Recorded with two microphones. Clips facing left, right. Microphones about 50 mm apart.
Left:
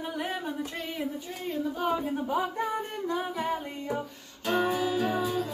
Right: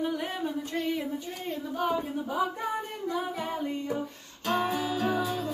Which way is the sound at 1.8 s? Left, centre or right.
Left.